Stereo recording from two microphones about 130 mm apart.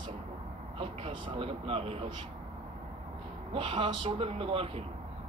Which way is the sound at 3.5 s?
45° right (ahead or behind).